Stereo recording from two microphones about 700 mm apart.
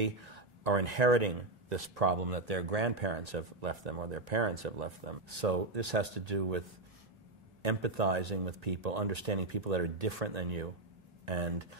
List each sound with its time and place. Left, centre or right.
0.0 s speech: right
7.6 s speech: right